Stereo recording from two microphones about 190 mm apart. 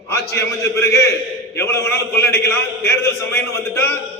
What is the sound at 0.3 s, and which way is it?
A man's voice, 15° left (ahead or behind).